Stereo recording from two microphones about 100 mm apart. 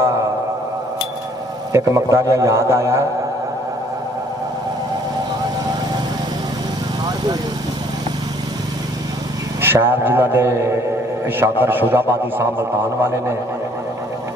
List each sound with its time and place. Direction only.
1.7 s a man's voice: 30° right (ahead or behind)
9.6 s a man's voice: 20° right (ahead or behind)